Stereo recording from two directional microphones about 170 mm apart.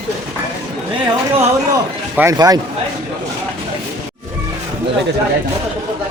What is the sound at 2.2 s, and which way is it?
Speech, 20° right (ahead or behind).